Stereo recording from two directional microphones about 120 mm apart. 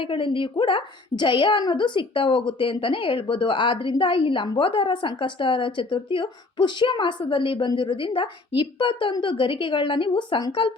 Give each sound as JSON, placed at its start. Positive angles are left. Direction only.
{"t": 0.0, "sound": "a woman's voice", "side_deg": 45}